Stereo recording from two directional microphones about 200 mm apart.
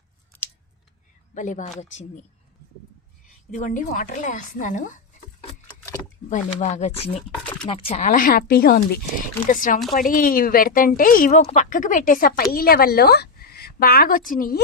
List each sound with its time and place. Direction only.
1.3 s speech: 40° left (ahead or behind)
3.5 s a woman's voice: 40° left (ahead or behind)
6.3 s a woman's voice: 35° left (ahead or behind)